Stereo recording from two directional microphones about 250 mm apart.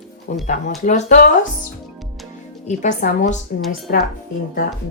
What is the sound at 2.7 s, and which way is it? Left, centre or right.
Speech, left.